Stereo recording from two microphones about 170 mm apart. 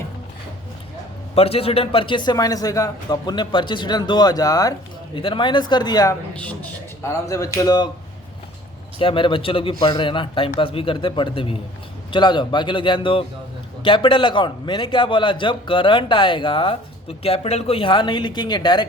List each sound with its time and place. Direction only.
1.4 s a man's voice: 35° left (ahead or behind)
6.3 s a man's voice: 10° left (ahead or behind)
9.0 s a man's voice: 30° left (ahead or behind)